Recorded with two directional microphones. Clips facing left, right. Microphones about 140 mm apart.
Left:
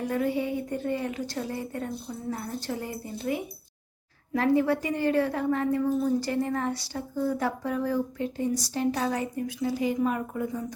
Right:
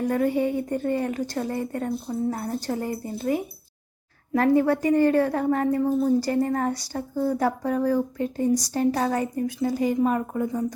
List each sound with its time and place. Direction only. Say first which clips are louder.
0.0 s a woman's voice: right 5 dB; 50° right (ahead or behind)